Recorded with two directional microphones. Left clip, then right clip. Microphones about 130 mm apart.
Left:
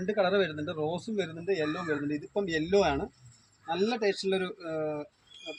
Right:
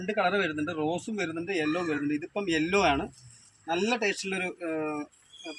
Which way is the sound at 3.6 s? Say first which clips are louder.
Right 1 dB; 10° left (ahead or behind).